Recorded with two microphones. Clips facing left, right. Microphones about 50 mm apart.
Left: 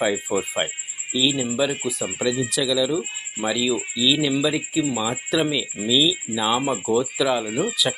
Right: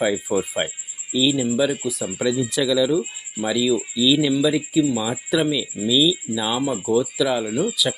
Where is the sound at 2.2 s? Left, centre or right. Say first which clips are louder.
Right 2 dB; centre.